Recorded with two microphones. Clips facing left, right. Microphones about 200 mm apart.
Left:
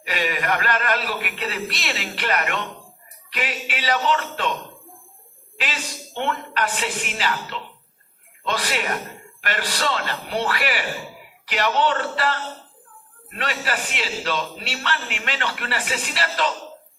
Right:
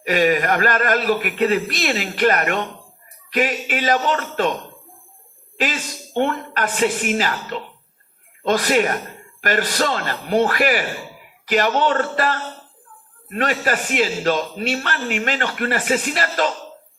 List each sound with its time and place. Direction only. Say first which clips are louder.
0.0 s a man's voice: right 8 dB; 50° right (ahead or behind)
1.7 s speech: right 7 dB; centre (ahead or behind)
2.1 s a man's voice: right 6 dB; 45° right (ahead or behind)
6.2 s a man's voice: right 3 dB; 45° right (ahead or behind)
13.7 s a man's voice: right 8 dB; 45° right (ahead or behind)
14.9 s speech: right 8 dB; centre (ahead or behind)
15.2 s a man's voice: right 6 dB; 45° right (ahead or behind)